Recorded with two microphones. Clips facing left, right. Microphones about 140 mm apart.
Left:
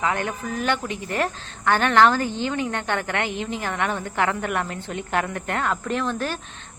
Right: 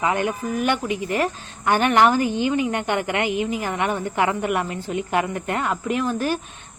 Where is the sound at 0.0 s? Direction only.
15° right (ahead or behind).